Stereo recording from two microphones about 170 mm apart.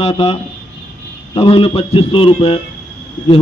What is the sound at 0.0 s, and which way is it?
Speech, 35° left (ahead or behind).